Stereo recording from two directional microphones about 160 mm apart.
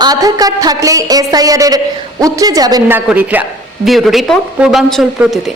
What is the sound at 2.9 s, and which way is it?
A man's voice, 10° right (ahead or behind).